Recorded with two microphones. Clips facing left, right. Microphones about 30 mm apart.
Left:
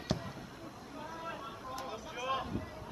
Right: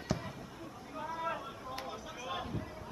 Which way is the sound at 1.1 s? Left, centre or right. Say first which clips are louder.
Right 6 dB; right.